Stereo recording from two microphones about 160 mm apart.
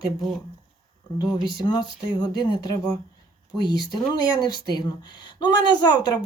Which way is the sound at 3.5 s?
25° left (ahead or behind).